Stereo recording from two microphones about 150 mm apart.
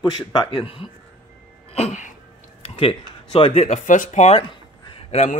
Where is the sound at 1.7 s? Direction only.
50° left (ahead or behind).